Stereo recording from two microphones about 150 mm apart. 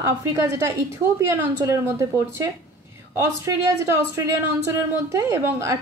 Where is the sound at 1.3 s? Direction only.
20° right (ahead or behind).